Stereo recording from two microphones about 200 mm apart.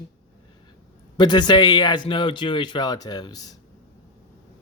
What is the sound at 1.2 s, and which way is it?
Speech, 20° left (ahead or behind).